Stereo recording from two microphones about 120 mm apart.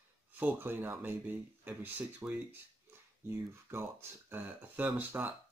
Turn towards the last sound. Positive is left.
turn(degrees=-15)  # may be behind; listen again after turning